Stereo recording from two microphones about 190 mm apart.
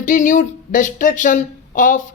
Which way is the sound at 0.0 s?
45° left (ahead or behind).